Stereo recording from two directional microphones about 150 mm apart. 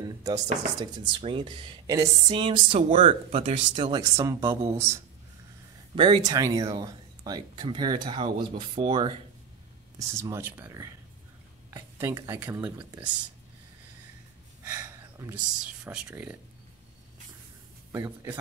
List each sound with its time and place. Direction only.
0.0 s a sound: 20° right (ahead or behind)
0.7 s speech: 30° right (ahead or behind)
5.9 s speech: 35° right (ahead or behind)
6.2 s speech: 20° right (ahead or behind)
9.9 s speech: 20° right (ahead or behind)
14.6 s a sound: 20° right (ahead or behind)
15.6 s speech: 5° right (ahead or behind)
17.9 s speech: 20° right (ahead or behind)